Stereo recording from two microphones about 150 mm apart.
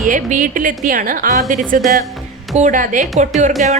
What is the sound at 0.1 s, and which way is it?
Speech, 60° right (ahead or behind).